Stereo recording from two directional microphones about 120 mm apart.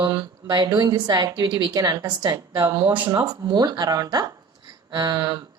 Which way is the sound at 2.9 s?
15° right (ahead or behind).